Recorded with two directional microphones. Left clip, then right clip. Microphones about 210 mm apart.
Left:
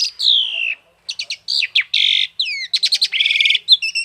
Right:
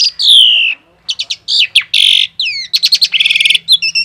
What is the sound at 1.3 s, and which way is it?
Bird, 55° right (ahead or behind).